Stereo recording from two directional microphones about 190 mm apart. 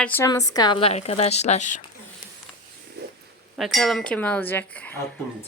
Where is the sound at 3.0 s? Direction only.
60° right (ahead or behind).